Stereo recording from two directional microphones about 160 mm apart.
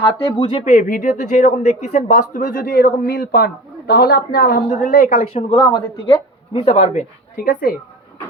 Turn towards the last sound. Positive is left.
turn(degrees=65)  # may be behind; listen again after turning